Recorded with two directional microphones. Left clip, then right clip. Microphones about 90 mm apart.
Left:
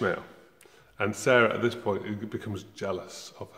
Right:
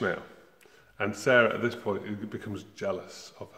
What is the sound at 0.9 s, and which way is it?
A man's voice, 35° left (ahead or behind).